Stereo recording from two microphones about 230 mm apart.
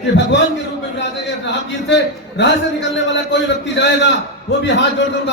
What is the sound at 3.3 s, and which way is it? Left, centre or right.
A man's voice, left.